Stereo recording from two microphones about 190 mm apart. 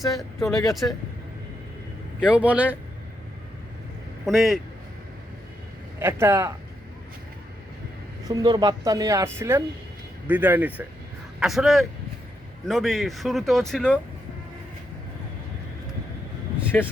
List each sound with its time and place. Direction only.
0.3 s speech: 15° left (ahead or behind)
0.7 s speech: centre (ahead or behind)
2.2 s a woman's voice: 5° right (ahead or behind)
4.3 s speech: centre (ahead or behind)
6.0 s a woman's voice: 10° right (ahead or behind)
8.3 s a woman's voice: 20° right (ahead or behind); by 14.0 s 5° left (ahead or behind)
16.7 s speech: 5° left (ahead or behind)